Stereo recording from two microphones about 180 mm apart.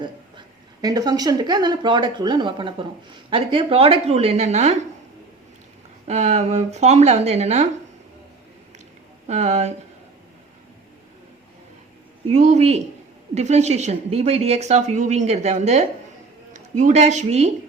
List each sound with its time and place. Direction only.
0.0 s a woman's voice: 25° right (ahead or behind); by 4.9 s 40° right (ahead or behind)
6.1 s a woman's voice: 35° right (ahead or behind)
9.2 s a woman's voice: 40° right (ahead or behind)
12.3 s a woman's voice: 40° right (ahead or behind)